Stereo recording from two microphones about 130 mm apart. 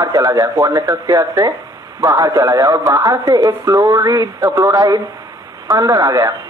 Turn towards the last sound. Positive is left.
turn(degrees=-25)  # may be behind; listen again after turning